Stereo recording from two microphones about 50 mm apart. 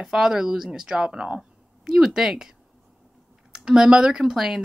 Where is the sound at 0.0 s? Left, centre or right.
Centre.